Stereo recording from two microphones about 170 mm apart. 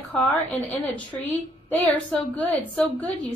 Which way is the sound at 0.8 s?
10° left (ahead or behind).